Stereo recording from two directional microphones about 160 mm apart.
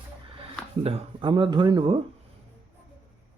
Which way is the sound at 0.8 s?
35° right (ahead or behind).